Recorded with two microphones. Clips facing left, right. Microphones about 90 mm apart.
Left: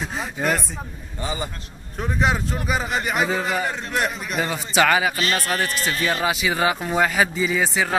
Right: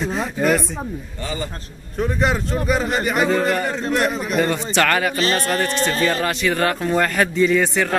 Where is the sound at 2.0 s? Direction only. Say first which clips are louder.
Right 2 dB; centre (ahead or behind).